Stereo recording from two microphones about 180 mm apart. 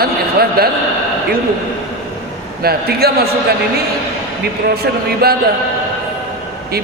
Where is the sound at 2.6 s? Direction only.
60° right (ahead or behind).